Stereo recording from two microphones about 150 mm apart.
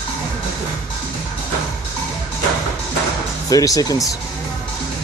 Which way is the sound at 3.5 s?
25° left (ahead or behind).